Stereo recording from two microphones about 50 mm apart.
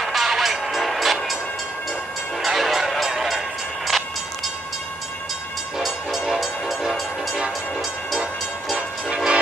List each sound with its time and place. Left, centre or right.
0.1 s music: centre
2.4 s music: centre
5.8 s train: centre
8.7 s train: centre